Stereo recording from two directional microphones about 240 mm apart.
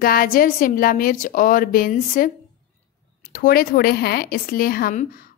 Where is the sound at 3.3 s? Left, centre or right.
Left.